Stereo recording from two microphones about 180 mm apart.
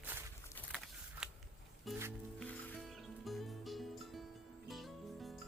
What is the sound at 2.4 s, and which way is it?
Music, 5° left (ahead or behind).